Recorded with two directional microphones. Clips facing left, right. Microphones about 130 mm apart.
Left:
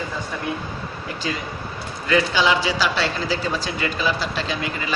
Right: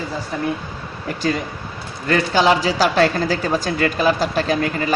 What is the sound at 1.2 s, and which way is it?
A man's voice, 45° right (ahead or behind).